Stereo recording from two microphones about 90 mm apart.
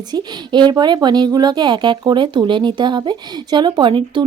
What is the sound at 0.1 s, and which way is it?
A woman's voice, 55° right (ahead or behind).